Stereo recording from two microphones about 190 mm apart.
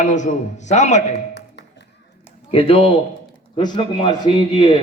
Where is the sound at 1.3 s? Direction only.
65° left (ahead or behind).